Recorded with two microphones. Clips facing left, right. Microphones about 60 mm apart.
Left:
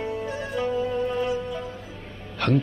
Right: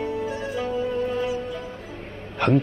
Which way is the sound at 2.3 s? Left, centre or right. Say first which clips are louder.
Right 3 dB; right.